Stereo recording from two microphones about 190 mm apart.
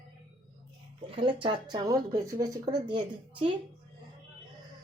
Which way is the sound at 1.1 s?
25° right (ahead or behind).